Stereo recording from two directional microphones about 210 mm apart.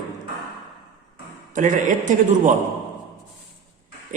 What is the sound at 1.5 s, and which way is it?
Speech, 40° right (ahead or behind).